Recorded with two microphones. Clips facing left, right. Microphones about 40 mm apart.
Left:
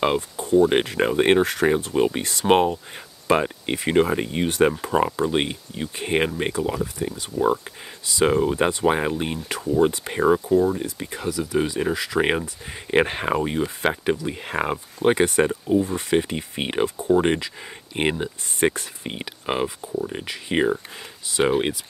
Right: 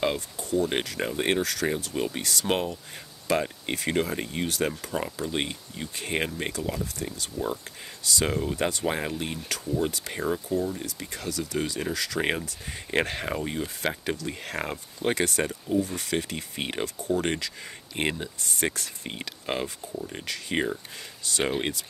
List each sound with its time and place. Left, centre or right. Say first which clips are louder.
0.0 s speech: left 6 dB; left
10.8 s speech: left 6 dB; left